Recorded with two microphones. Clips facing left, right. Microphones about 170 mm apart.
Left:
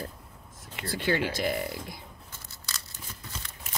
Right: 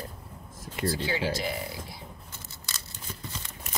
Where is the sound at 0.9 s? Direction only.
55° left (ahead or behind).